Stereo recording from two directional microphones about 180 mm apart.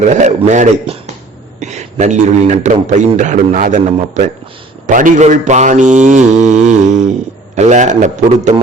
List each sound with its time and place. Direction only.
0.1 s mantra: 40° right (ahead or behind)
1.5 s a man's voice: 40° right (ahead or behind)
4.9 s mantra: 45° right (ahead or behind)